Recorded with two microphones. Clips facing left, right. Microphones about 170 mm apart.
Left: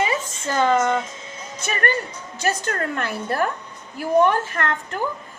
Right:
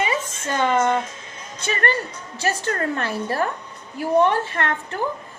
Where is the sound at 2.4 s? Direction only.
30° right (ahead or behind).